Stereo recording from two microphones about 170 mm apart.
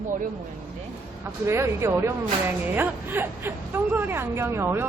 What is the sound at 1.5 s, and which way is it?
Speech, 15° right (ahead or behind).